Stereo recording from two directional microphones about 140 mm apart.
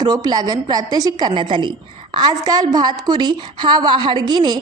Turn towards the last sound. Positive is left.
turn(degrees=-30)  # may be behind; listen again after turning